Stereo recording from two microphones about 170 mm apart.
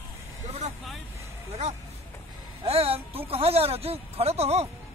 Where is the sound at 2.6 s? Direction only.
35° right (ahead or behind).